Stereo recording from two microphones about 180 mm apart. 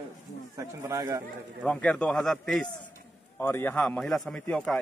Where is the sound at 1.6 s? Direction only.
5° left (ahead or behind).